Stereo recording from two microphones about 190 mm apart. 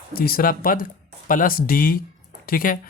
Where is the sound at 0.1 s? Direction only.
50° left (ahead or behind).